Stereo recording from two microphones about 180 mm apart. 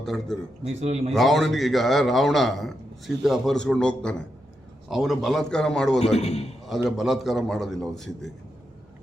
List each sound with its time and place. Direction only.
0.0 s a man's voice: centre (ahead or behind)
0.6 s a man's voice: 40° right (ahead or behind)
1.1 s a man's voice: centre (ahead or behind)
6.1 s a man's voice: 35° left (ahead or behind)
6.7 s a man's voice: centre (ahead or behind)